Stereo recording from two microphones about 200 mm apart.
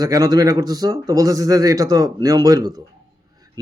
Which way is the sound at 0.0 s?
20° right (ahead or behind).